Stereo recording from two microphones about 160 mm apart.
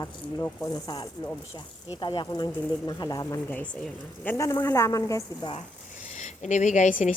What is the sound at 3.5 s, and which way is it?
Speech, 10° left (ahead or behind).